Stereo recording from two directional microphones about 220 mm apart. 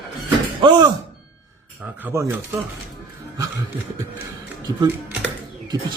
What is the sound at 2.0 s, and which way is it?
Speech, 15° right (ahead or behind).